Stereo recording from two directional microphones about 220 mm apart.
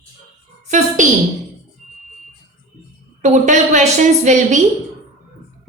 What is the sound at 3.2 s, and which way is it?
A woman's voice, 35° right (ahead or behind).